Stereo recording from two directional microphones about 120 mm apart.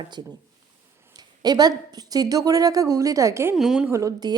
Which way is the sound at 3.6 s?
5° right (ahead or behind).